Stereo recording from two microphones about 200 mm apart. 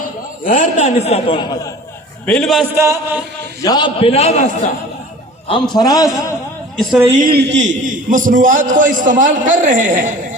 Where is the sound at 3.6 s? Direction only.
20° left (ahead or behind).